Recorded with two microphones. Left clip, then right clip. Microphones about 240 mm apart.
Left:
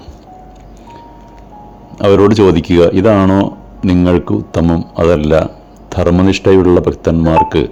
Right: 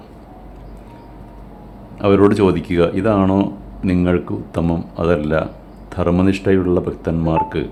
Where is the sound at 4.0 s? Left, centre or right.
Left.